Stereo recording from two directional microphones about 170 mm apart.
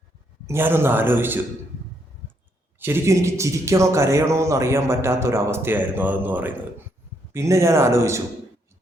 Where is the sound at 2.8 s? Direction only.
15° right (ahead or behind).